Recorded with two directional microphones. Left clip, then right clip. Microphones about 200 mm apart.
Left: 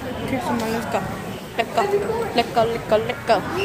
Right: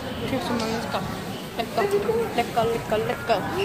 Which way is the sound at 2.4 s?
55° left (ahead or behind).